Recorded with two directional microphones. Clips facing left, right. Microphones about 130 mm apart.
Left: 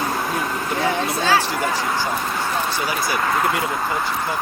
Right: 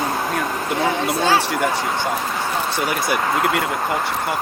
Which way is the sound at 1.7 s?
25° right (ahead or behind).